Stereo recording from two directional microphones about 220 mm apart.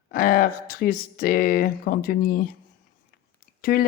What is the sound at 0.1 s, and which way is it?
Speech, 40° left (ahead or behind).